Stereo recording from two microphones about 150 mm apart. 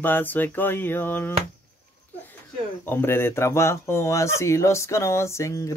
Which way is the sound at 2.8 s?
15° left (ahead or behind).